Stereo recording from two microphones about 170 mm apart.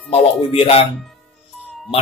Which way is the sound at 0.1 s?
35° left (ahead or behind).